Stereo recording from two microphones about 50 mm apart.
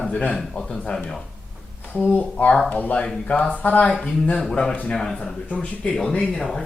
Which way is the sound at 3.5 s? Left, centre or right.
Left.